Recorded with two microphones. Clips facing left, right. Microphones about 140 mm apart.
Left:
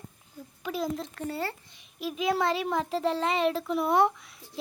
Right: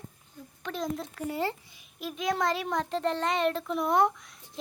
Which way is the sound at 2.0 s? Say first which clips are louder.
Left 2 dB; centre (ahead or behind).